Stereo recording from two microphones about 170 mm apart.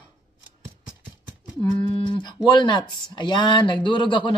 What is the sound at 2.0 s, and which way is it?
Speech, 25° left (ahead or behind).